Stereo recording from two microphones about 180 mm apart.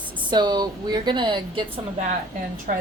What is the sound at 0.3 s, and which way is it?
A woman's voice, 25° right (ahead or behind).